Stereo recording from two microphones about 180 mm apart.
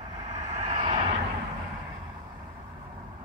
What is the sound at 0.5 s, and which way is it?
Vehicle, 40° right (ahead or behind).